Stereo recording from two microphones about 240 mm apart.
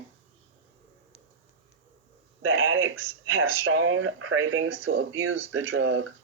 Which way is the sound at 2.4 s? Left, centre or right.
Right.